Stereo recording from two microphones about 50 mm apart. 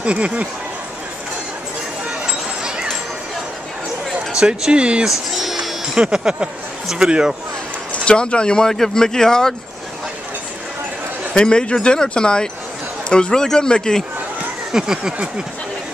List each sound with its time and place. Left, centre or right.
0.0 s speech: right
2.0 s a sound: centre
4.3 s speech: centre
5.3 s speech: centre
7.9 s speech: left
11.3 s speech: centre
14.7 s speech: centre